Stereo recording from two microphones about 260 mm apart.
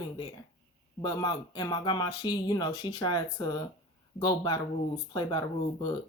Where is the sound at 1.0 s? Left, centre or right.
Centre.